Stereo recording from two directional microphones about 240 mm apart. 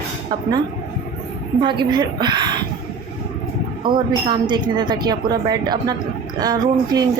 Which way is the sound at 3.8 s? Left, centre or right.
Centre.